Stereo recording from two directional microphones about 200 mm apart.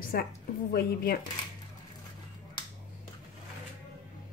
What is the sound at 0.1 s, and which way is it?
A woman's voice, 50° left (ahead or behind).